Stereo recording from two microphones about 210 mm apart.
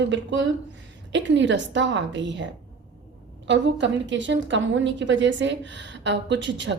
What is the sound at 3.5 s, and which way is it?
A woman's voice, 60° right (ahead or behind).